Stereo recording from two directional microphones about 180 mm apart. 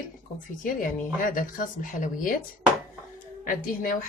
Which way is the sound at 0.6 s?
50° left (ahead or behind).